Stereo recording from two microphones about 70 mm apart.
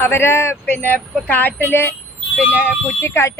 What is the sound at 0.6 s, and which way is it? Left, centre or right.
Speech, left.